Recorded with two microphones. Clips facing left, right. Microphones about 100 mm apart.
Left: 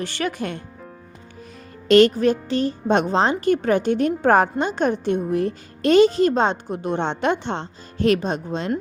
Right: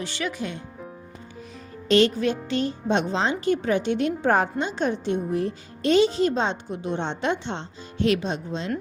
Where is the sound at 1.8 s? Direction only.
55° left (ahead or behind).